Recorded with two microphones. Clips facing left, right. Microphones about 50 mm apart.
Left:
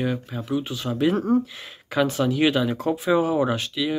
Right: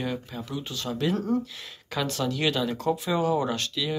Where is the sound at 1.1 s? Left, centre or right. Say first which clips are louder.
Left 4 dB; left.